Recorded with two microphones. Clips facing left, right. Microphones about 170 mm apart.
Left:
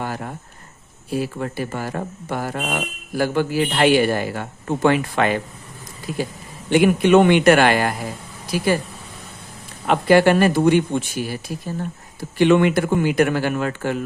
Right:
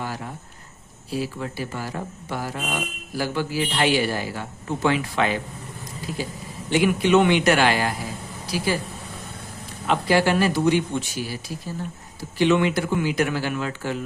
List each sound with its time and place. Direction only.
0.0 s cricket: 55° left (ahead or behind)
1.1 s speech: 55° left (ahead or behind)
9.8 s speech: 55° left (ahead or behind)